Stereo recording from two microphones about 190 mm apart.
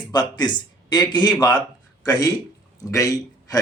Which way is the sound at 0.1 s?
25° left (ahead or behind).